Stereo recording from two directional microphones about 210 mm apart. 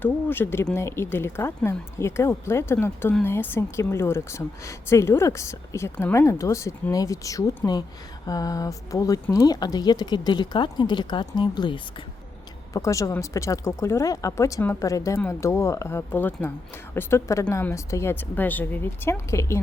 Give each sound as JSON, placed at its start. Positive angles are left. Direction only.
{"t": 0.0, "sound": "speech", "side_deg": 10}